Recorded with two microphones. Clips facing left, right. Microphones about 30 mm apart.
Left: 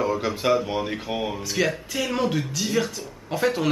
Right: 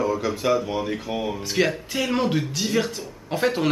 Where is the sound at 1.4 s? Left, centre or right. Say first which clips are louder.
Right 2 dB; centre.